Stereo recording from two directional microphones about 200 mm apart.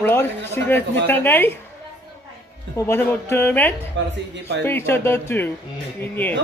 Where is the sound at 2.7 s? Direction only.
10° left (ahead or behind).